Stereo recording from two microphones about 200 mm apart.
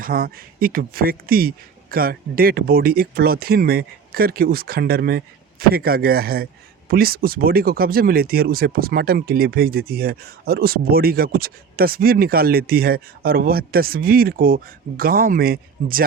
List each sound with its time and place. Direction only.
0.0 s speech: 45° right (ahead or behind)